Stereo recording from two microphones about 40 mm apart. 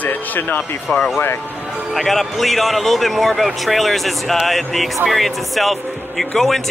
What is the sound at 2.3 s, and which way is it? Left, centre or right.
Speech, centre.